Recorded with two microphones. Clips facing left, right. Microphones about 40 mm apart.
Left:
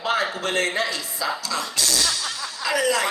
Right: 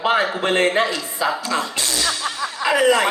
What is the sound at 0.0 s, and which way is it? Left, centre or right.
A man's voice, right.